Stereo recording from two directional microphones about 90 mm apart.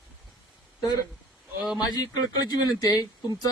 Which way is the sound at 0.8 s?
45° left (ahead or behind).